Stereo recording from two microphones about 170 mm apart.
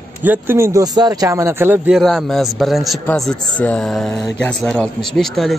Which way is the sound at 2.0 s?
Centre (ahead or behind).